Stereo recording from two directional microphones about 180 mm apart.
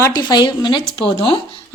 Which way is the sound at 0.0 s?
20° left (ahead or behind).